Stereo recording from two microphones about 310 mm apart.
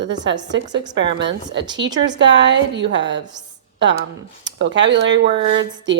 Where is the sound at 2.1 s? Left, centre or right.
Right.